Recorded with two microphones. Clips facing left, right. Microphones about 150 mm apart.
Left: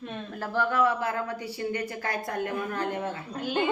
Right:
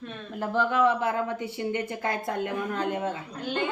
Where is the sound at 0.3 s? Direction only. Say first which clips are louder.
Right 2 dB; 20° right (ahead or behind).